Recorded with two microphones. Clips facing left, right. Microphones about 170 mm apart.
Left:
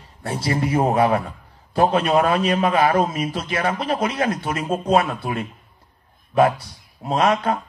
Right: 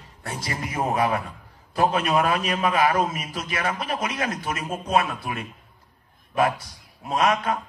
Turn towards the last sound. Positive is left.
turn(degrees=30)  # may be behind; listen again after turning